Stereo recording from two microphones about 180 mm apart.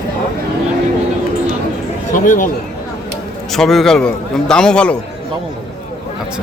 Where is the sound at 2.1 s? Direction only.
45° left (ahead or behind).